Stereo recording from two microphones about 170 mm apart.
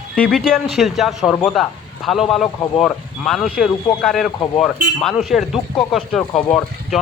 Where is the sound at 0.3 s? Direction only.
5° left (ahead or behind).